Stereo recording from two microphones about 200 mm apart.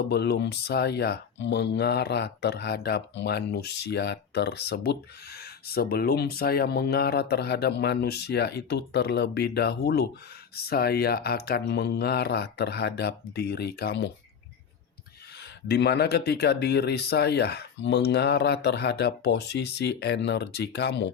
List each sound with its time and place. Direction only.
0.1 s speech: 55° left (ahead or behind)
15.6 s speech: 55° left (ahead or behind)